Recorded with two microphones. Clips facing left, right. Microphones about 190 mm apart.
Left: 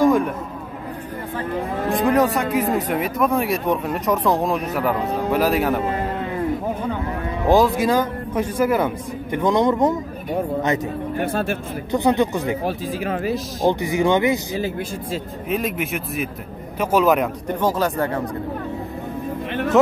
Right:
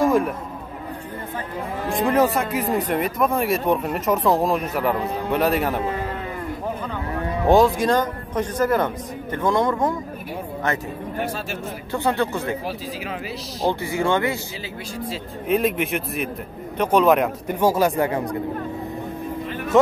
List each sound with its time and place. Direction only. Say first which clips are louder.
0.0 s a sound: left 2 dB; centre (ahead or behind)
1.9 s speech: left 1 dB; centre (ahead or behind)
7.4 s speech: even; centre (ahead or behind); by 9.9 s 20° left (ahead or behind)
11.9 s speech: left 4 dB; 15° left (ahead or behind)
12.6 s speech: left 5 dB; 50° left (ahead or behind)
13.7 s speech: left 3 dB; 15° left (ahead or behind)
15.4 s speech: right 4 dB; centre (ahead or behind)
17.6 s speech: right 2 dB; 10° right (ahead or behind)
19.7 s speech: left 1 dB; centre (ahead or behind)